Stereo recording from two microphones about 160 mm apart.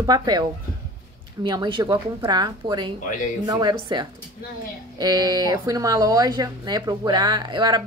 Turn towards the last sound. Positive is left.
turn(degrees=-25)  # may be behind; listen again after turning